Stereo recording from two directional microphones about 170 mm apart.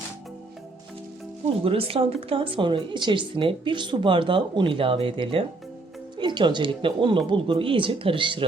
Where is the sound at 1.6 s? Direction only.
35° right (ahead or behind).